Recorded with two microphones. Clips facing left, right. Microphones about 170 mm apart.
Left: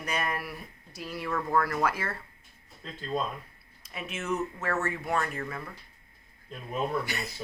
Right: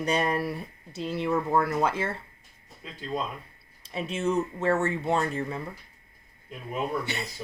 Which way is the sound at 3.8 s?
30° right (ahead or behind).